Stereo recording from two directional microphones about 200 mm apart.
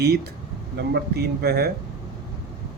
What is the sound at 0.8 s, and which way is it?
Speech, 55° right (ahead or behind).